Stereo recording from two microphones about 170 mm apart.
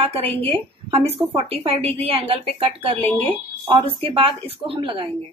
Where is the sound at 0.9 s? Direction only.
35° right (ahead or behind).